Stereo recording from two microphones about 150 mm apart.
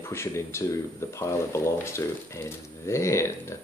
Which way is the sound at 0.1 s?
15° left (ahead or behind).